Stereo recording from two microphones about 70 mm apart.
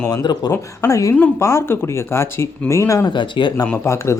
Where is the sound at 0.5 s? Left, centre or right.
Left.